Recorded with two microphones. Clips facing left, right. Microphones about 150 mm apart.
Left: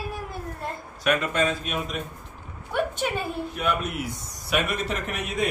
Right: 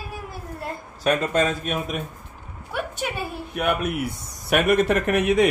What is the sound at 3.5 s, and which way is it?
Speech, 60° right (ahead or behind).